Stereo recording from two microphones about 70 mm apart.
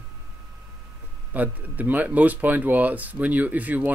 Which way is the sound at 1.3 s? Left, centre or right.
Right.